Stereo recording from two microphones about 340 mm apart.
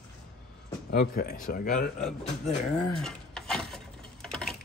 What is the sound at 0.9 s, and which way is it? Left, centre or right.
Speech, left.